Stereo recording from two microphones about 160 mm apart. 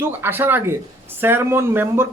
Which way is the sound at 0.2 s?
15° right (ahead or behind).